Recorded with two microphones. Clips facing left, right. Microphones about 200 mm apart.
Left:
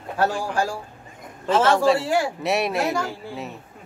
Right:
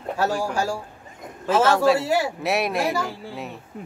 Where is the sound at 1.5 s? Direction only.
5° right (ahead or behind).